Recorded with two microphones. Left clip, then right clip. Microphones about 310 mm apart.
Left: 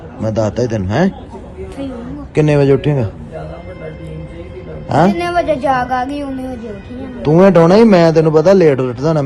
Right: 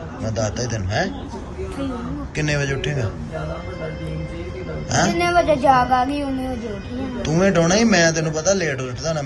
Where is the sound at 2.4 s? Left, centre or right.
Centre.